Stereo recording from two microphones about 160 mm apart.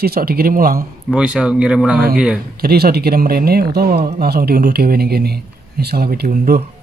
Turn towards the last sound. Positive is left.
turn(degrees=-80)